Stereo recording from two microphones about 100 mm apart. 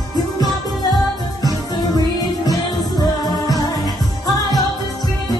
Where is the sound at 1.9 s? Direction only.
40° left (ahead or behind).